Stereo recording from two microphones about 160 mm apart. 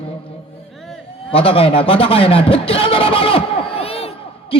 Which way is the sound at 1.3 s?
35° left (ahead or behind).